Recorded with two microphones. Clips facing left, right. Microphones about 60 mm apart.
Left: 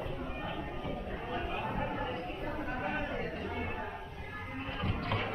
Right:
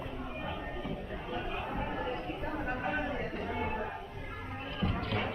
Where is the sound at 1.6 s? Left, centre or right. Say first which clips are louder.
Left 1 dB; centre.